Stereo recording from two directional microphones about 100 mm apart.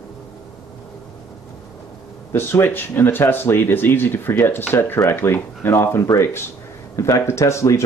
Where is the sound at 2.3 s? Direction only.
25° left (ahead or behind).